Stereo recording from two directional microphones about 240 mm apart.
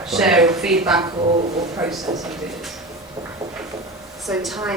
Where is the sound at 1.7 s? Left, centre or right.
Centre.